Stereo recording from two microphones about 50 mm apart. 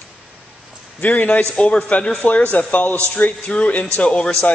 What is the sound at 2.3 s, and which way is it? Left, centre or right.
Speech, left.